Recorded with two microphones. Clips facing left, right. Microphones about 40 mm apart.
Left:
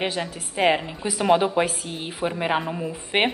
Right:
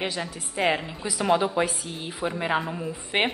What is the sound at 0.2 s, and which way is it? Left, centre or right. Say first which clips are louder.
A woman's voice: left 5 dB; centre.